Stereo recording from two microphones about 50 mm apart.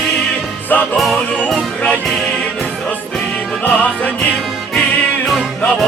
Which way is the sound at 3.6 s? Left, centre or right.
Left.